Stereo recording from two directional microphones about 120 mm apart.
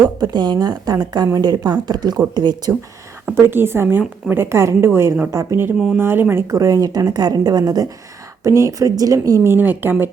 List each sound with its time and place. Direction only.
0.2 s a woman's voice: 35° right (ahead or behind)
3.4 s a woman's voice: 20° right (ahead or behind)